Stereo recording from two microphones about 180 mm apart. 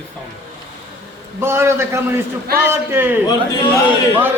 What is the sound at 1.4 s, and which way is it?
A man's voice, 15° right (ahead or behind).